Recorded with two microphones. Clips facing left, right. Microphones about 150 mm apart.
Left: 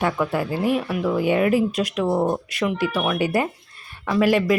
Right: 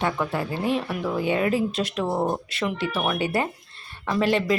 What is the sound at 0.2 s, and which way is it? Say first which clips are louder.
Speech: left 4 dB; 10° left (ahead or behind).